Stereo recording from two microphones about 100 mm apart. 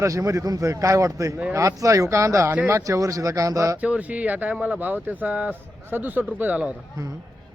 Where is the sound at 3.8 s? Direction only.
15° right (ahead or behind).